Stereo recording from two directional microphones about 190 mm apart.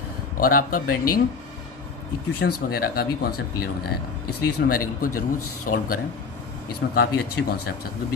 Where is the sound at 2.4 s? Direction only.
55° left (ahead or behind).